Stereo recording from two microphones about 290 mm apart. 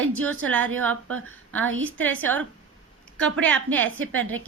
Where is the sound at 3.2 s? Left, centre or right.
Centre.